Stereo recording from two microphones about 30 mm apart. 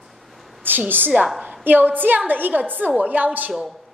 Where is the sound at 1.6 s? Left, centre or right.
Right.